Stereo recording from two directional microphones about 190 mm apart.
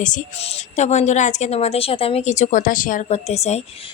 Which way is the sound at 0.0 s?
40° left (ahead or behind).